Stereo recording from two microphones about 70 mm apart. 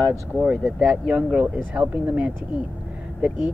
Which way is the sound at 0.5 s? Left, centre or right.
Centre.